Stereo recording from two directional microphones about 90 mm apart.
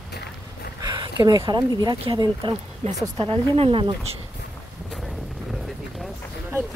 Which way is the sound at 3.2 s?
90° right.